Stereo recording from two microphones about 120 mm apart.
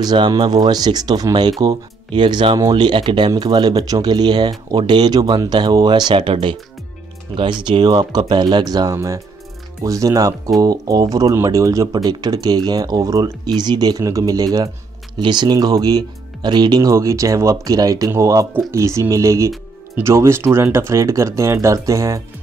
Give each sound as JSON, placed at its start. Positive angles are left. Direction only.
{"t": 0.0, "sound": "speech", "side_deg": -35}